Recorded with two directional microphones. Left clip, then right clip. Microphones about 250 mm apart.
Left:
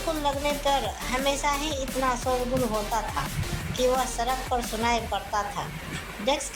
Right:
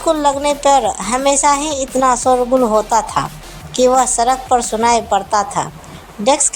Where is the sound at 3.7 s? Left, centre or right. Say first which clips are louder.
Right 13 dB; right.